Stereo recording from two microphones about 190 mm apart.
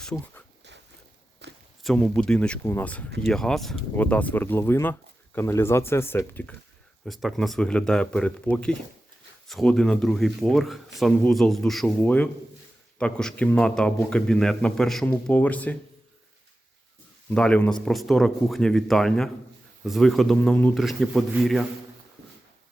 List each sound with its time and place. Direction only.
0.0 s a sound: 5° left (ahead or behind)
1.4 s walk: 60° right (ahead or behind)
1.8 s speech: centre (ahead or behind)
7.0 s speech: centre (ahead or behind)
17.2 s speech: 5° left (ahead or behind)